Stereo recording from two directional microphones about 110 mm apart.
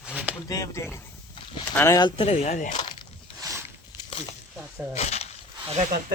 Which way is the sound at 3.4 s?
25° right (ahead or behind).